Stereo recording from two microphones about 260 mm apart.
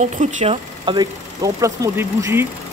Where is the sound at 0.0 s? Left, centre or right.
Right.